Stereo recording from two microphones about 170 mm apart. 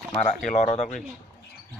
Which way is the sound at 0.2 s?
45° left (ahead or behind).